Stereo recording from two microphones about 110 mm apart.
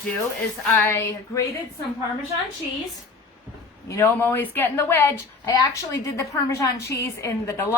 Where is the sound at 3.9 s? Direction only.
25° left (ahead or behind).